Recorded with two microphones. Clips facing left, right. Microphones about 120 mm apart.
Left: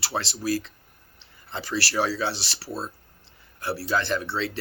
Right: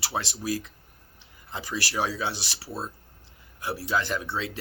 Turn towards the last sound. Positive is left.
turn(degrees=-15)  # may be behind; listen again after turning